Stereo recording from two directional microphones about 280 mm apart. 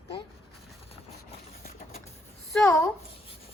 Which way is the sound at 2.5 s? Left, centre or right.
Centre.